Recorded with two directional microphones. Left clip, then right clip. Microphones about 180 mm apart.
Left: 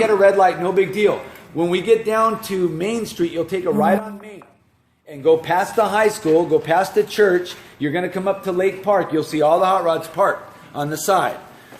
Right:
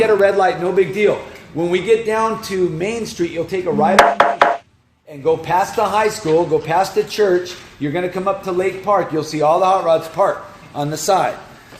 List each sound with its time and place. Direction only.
0.0 s a man's voice: 60° left (ahead or behind)
5.2 s a man's voice: 55° left (ahead or behind)